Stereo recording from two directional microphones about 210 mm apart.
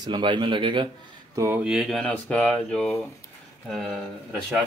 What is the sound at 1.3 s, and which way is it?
Speech, 10° right (ahead or behind).